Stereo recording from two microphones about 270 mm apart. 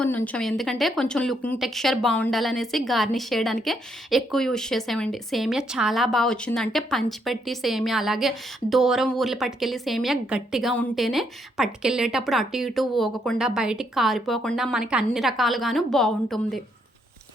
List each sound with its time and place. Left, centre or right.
0.0 s a woman's voice: centre